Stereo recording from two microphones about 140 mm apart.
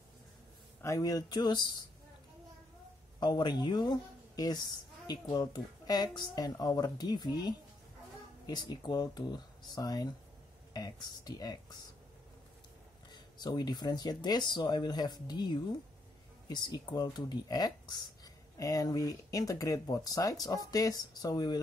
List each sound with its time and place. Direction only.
0.8 s speech: 25° left (ahead or behind)
3.2 s speech: 30° left (ahead or behind)
13.1 s speech: 30° left (ahead or behind)